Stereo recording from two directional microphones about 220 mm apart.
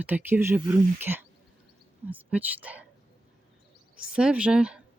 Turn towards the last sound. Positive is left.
turn(degrees=-5)  # may be behind; listen again after turning